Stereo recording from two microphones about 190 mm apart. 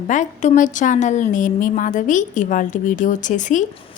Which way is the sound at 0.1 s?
40° left (ahead or behind).